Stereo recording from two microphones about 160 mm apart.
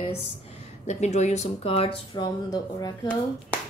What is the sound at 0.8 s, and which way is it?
Speech, 45° left (ahead or behind).